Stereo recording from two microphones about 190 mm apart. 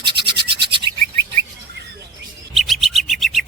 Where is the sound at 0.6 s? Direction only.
25° right (ahead or behind).